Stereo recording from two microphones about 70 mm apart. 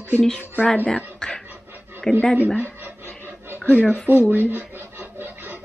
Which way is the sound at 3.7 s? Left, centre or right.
Centre.